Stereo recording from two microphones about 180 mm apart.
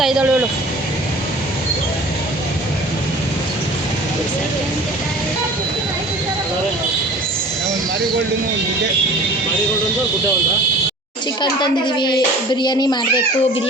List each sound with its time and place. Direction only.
0.0 s speech: 5° right (ahead or behind)
11.6 s a child's voice: 25° left (ahead or behind)